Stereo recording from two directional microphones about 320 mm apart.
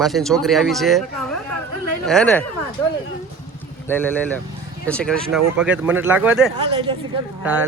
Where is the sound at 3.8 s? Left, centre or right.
Centre.